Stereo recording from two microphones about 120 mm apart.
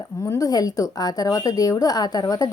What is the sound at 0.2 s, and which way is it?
A woman's voice, 25° left (ahead or behind).